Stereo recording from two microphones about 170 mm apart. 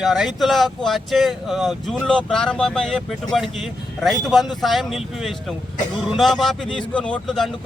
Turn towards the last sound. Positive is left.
turn(degrees=0)  # may be behind; listen again after turning